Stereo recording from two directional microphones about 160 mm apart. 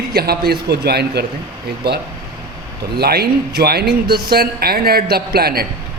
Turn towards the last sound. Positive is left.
turn(degrees=-75)  # may be behind; listen again after turning